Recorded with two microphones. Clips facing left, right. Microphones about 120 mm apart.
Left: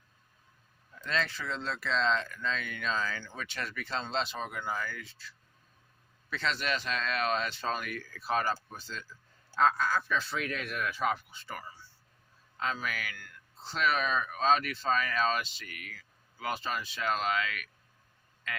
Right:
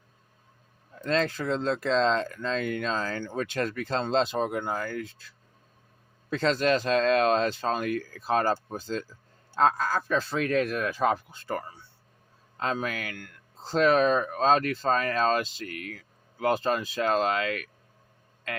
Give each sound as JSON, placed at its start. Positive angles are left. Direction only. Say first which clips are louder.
{"t": 0.9, "sound": "speech", "louder": "right 7 dB", "side_deg": -40}
{"t": 6.3, "sound": "speech", "louder": "right 9 dB", "side_deg": -40}
{"t": 13.7, "sound": "speech", "louder": "right 9 dB", "side_deg": -40}